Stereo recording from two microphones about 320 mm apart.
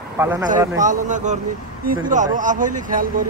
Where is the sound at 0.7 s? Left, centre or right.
Right.